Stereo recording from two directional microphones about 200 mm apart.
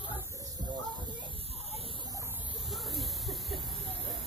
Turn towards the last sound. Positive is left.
turn(degrees=0)  # may be behind; listen again after turning